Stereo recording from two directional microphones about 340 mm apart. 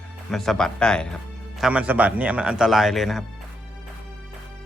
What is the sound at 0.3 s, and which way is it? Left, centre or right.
A man's voice, centre.